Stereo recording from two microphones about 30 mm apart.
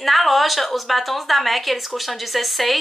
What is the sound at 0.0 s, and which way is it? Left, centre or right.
Speech, centre.